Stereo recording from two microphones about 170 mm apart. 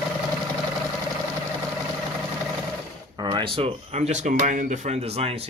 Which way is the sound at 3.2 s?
30° right (ahead or behind).